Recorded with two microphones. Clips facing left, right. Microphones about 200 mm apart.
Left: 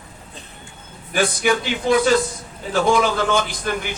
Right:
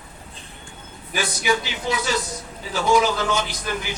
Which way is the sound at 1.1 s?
50° left (ahead or behind).